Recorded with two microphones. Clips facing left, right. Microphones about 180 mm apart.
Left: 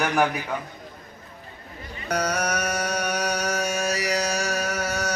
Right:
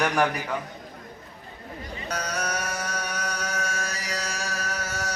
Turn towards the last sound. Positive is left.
turn(degrees=65)  # may be behind; listen again after turning